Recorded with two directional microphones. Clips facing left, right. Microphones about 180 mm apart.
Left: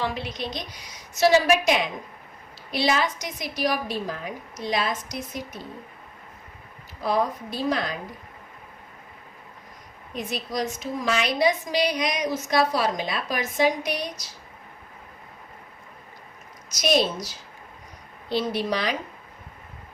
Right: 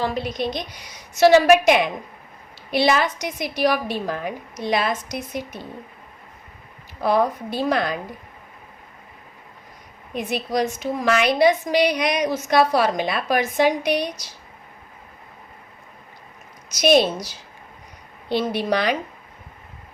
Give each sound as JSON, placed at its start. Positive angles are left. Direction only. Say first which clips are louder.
{"t": 0.0, "sound": "a woman's voice", "louder": "right 5 dB", "side_deg": -40}
{"t": 1.2, "sound": "a woman's voice", "louder": "right 6 dB", "side_deg": -60}
{"t": 7.0, "sound": "a woman's voice", "louder": "right 5 dB", "side_deg": -65}
{"t": 10.2, "sound": "a woman's voice", "louder": "right 6 dB", "side_deg": -65}
{"t": 18.3, "sound": "a woman's voice", "louder": "right 4 dB", "side_deg": -60}